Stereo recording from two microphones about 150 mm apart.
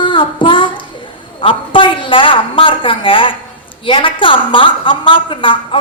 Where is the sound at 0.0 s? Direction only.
35° left (ahead or behind).